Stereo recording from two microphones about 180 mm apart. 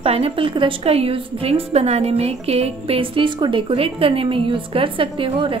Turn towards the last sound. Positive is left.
turn(degrees=-30)  # may be behind; listen again after turning